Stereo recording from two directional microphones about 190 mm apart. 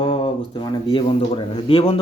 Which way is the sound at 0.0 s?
30° left (ahead or behind).